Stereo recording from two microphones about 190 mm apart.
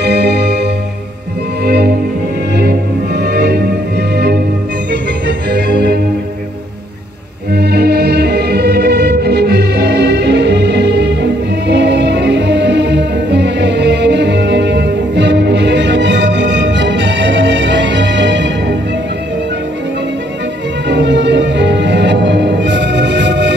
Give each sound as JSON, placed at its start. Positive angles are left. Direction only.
{"t": 0.0, "sound": "music", "side_deg": -60}
{"t": 1.7, "sound": "music", "side_deg": -55}
{"t": 3.2, "sound": "music", "side_deg": -60}
{"t": 5.5, "sound": "music", "side_deg": -55}
{"t": 7.5, "sound": "music", "side_deg": -55}
{"t": 20.9, "sound": "music", "side_deg": -65}